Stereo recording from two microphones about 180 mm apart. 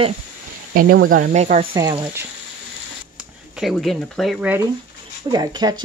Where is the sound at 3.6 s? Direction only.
Centre (ahead or behind).